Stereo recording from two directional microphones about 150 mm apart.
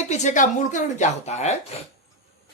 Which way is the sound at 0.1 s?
50° left (ahead or behind).